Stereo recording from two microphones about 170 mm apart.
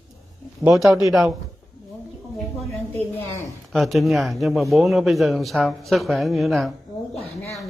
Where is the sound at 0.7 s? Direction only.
Centre (ahead or behind).